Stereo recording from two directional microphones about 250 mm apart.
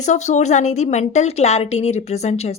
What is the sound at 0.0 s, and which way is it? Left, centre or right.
A woman's voice, left.